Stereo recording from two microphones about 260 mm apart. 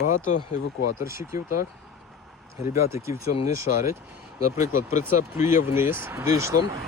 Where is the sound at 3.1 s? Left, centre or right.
Left.